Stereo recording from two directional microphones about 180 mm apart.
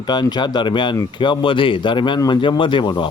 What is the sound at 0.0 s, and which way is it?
A man's voice, 25° left (ahead or behind).